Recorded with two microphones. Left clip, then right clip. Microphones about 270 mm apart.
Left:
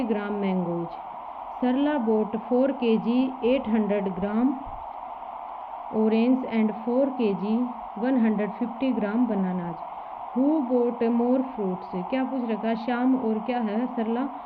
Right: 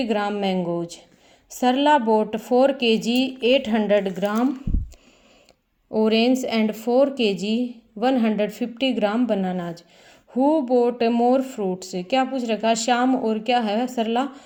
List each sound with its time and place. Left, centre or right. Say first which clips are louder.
0.0 s speech: right 5 dB; centre
1.6 s speech: right 7 dB; centre
6.0 s speech: right 4 dB; centre